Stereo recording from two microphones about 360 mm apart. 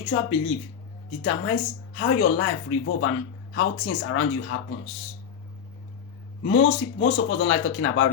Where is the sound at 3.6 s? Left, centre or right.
Left.